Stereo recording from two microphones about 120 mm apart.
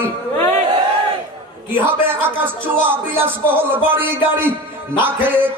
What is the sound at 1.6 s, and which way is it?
Speech, 15° right (ahead or behind).